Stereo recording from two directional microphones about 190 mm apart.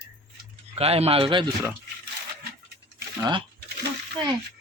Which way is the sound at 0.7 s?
30° right (ahead or behind).